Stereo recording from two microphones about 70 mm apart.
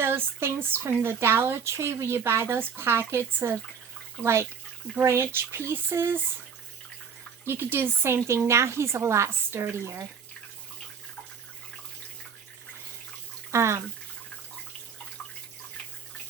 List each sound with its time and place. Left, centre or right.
0.0 s speech: right
7.4 s speech: right
13.5 s speech: right